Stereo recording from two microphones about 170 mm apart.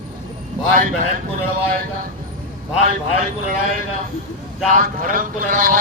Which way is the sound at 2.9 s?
55° right (ahead or behind).